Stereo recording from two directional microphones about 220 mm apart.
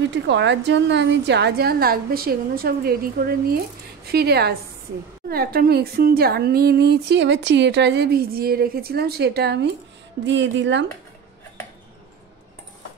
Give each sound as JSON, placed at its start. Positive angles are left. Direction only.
{"t": 0.1, "sound": "speech", "side_deg": -55}